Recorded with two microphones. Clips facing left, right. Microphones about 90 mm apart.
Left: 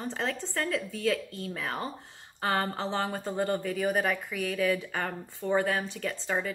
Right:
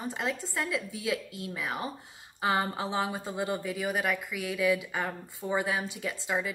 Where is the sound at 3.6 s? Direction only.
40° left (ahead or behind).